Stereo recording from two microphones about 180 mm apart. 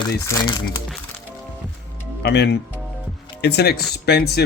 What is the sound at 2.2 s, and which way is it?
Speech, 70° left (ahead or behind).